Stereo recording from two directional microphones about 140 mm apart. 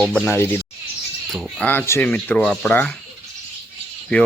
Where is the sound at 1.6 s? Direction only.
15° left (ahead or behind).